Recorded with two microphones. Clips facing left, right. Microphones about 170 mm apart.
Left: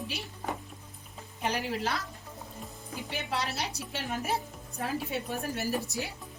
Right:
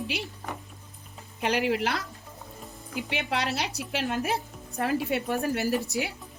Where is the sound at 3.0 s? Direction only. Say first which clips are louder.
Right 4 dB; 75° right (ahead or behind).